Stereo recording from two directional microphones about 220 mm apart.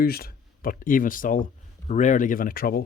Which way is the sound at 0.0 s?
40° left (ahead or behind).